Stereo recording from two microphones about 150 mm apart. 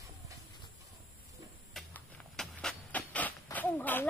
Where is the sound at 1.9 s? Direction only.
5° left (ahead or behind).